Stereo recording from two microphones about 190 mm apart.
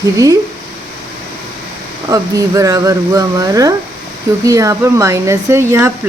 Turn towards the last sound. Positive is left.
turn(degrees=-15)  # may be behind; listen again after turning